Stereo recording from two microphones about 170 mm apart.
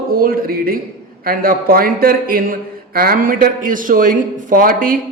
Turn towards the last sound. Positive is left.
turn(degrees=-55)  # may be behind; listen again after turning